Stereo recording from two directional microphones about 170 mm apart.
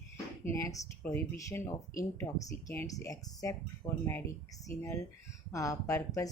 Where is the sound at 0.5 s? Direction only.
20° left (ahead or behind).